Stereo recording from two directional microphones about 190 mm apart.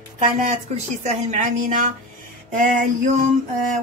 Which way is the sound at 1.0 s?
40° right (ahead or behind).